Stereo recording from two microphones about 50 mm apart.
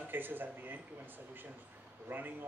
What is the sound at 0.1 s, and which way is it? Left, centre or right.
Speech, right.